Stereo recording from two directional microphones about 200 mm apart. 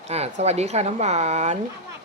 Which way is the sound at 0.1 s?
30° right (ahead or behind).